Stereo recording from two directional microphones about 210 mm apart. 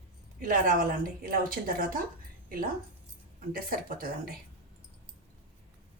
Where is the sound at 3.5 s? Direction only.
45° right (ahead or behind).